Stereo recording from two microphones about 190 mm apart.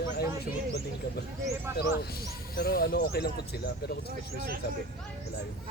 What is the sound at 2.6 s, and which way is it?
Speech, 50° left (ahead or behind).